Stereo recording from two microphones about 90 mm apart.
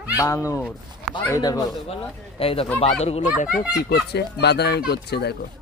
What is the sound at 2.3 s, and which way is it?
Speech, 90° left.